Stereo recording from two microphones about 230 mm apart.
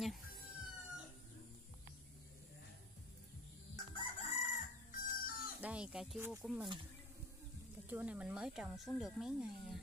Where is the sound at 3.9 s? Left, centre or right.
Left.